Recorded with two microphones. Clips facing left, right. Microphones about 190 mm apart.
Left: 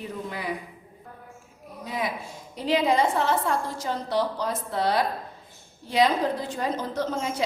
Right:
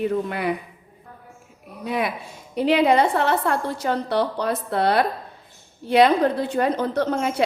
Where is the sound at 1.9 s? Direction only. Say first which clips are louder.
Right 5 dB; 65° right (ahead or behind).